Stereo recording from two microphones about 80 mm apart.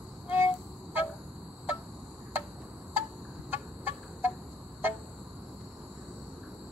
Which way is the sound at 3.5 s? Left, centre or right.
Right.